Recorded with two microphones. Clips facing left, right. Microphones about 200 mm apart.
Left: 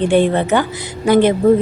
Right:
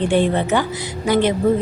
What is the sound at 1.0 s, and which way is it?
Speech, 50° left (ahead or behind).